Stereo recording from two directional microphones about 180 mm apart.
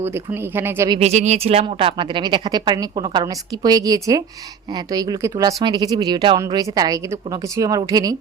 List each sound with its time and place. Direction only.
0.5 s speech: 15° right (ahead or behind)
0.9 s speech: 35° right (ahead or behind)